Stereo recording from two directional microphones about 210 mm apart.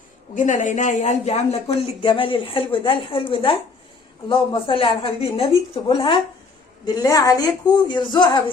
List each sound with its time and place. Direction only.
0.3 s speech: 35° left (ahead or behind)